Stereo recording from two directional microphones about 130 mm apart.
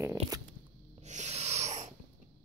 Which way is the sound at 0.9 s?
60° right (ahead or behind).